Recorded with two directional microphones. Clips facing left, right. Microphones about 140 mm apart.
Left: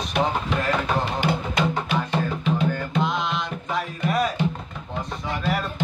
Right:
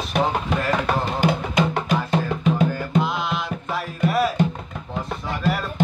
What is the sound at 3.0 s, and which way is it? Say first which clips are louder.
Music: right 2 dB; 5° right (ahead or behind).